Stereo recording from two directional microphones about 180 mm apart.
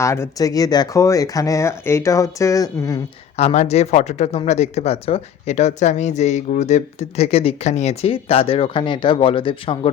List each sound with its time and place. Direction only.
0.0 s speech: 15° left (ahead or behind)
3.3 s speech: 35° left (ahead or behind)